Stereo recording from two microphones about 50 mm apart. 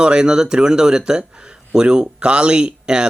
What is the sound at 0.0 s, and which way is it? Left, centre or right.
Speech, centre.